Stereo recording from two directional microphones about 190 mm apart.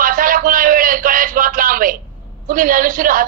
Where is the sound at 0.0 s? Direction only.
45° right (ahead or behind).